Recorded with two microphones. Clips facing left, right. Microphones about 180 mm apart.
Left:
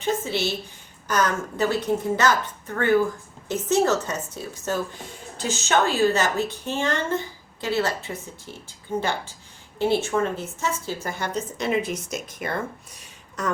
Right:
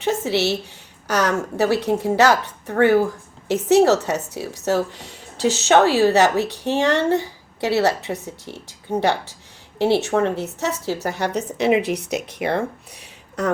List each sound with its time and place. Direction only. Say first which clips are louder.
0.0 s a sound: right 5 dB; 75° right (ahead or behind)
1.0 s a woman's voice: right 3 dB; 70° right (ahead or behind)
3.5 s a woman's voice: right 6 dB; 70° right (ahead or behind)